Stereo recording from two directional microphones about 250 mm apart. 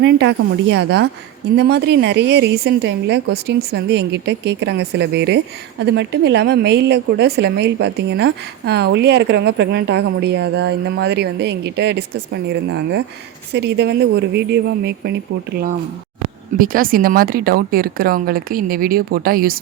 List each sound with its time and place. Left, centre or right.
0.0 s a woman's voice: right
16.6 s speech: right